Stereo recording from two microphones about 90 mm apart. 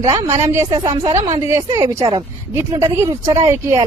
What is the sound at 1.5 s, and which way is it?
A woman's voice, 40° right (ahead or behind).